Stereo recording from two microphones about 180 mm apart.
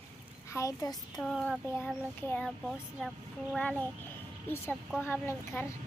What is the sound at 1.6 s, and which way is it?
Speech, 10° left (ahead or behind).